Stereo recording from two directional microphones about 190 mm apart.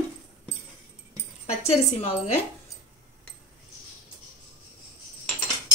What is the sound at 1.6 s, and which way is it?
Speech, 35° left (ahead or behind).